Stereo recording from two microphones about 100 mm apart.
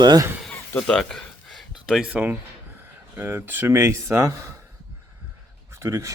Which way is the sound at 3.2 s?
20° right (ahead or behind).